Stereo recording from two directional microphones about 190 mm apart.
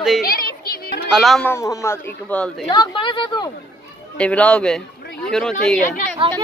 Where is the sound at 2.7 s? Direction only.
25° left (ahead or behind).